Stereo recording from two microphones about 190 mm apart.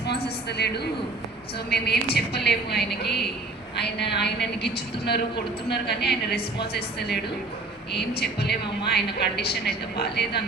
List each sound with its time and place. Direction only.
0.6 s a woman's voice: 60° left (ahead or behind)